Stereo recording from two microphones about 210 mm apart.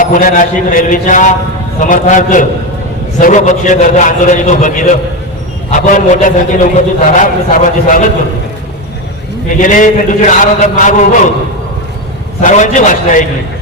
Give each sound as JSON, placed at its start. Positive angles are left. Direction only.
{"t": 0.0, "sound": "a man's voice", "side_deg": 40}
{"t": 9.5, "sound": "a man's voice", "side_deg": 40}
{"t": 12.4, "sound": "a man's voice", "side_deg": 35}